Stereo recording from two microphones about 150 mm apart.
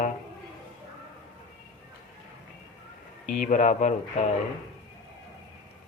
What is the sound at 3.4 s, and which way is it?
Speech, 55° left (ahead or behind).